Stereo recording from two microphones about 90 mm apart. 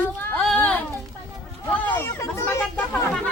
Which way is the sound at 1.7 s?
20° left (ahead or behind).